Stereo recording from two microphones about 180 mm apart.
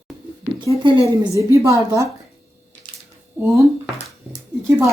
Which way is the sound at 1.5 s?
15° right (ahead or behind).